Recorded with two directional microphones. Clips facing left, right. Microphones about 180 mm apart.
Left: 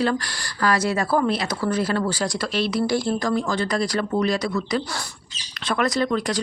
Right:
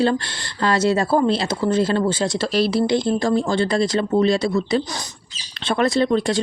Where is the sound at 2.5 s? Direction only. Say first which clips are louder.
Right 4 dB; 35° right (ahead or behind).